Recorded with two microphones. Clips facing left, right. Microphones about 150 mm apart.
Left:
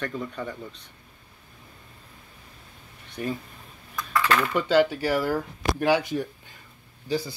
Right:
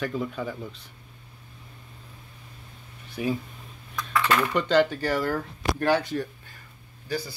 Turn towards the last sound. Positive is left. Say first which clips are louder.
# left 3 dB
turn(degrees=20)  # may be behind; listen again after turning